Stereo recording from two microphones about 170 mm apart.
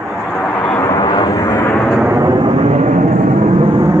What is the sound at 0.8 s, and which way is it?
Vehicle, 20° left (ahead or behind).